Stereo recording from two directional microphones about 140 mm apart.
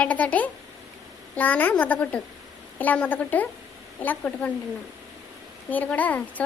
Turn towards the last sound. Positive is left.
turn(degrees=10)  # may be behind; listen again after turning